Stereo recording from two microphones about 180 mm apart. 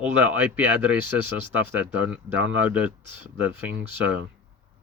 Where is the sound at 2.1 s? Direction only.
10° right (ahead or behind).